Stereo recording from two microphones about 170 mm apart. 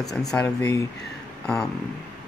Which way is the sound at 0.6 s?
20° left (ahead or behind).